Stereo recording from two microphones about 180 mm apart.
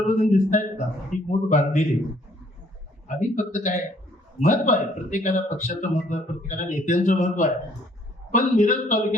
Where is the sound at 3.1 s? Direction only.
45° left (ahead or behind).